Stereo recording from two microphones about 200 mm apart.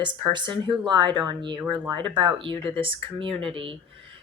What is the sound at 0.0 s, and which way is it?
A woman's voice, 25° right (ahead or behind).